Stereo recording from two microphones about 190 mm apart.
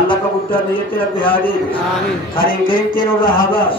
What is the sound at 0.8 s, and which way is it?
Speech, 50° left (ahead or behind).